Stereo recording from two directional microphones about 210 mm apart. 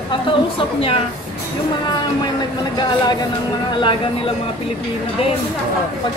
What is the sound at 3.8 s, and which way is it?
Speech, 25° left (ahead or behind).